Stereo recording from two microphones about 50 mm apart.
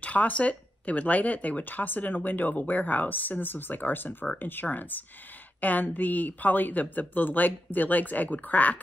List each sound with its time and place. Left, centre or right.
0.0 s speech: left